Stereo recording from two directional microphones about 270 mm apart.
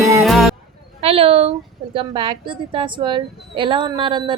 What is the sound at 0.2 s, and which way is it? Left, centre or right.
Music, centre.